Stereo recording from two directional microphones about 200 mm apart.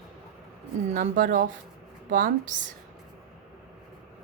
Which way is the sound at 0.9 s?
40° right (ahead or behind).